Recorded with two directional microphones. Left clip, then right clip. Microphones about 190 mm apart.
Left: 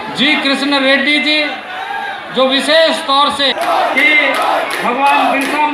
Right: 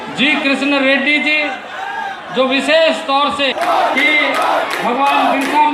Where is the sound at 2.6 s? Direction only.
25° right (ahead or behind).